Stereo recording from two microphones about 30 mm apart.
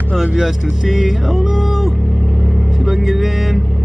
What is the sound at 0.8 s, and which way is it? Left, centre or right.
Speech, centre.